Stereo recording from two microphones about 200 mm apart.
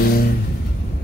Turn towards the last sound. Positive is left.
turn(degrees=50)  # may be behind; listen again after turning